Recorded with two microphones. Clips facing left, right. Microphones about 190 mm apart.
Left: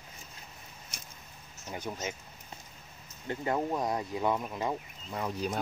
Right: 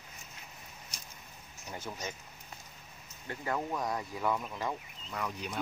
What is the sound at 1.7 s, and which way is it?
Speech, 15° left (ahead or behind).